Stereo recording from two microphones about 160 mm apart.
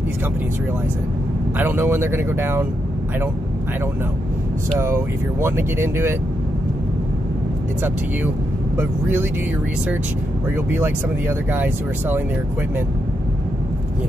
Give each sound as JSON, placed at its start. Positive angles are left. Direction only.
{"t": 1.6, "sound": "speech", "side_deg": -15}
{"t": 4.7, "sound": "speech", "side_deg": -15}
{"t": 8.7, "sound": "speech", "side_deg": -10}
{"t": 10.5, "sound": "speech", "side_deg": -15}